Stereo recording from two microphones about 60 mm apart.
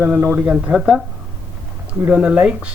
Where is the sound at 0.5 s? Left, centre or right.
Centre.